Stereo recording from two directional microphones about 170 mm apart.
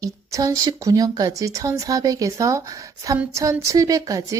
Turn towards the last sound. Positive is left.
turn(degrees=-20)  # may be behind; listen again after turning